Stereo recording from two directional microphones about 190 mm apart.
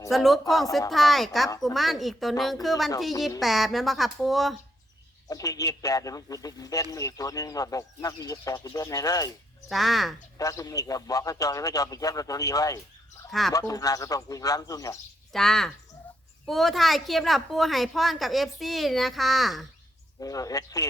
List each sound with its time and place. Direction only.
0.1 s a woman's voice: centre (ahead or behind)
5.3 s a man's voice: 15° left (ahead or behind)
9.6 s a woman's voice: centre (ahead or behind)
10.3 s a man's voice: 20° left (ahead or behind)
15.3 s a woman's voice: centre (ahead or behind)
20.2 s a man's voice: 20° left (ahead or behind)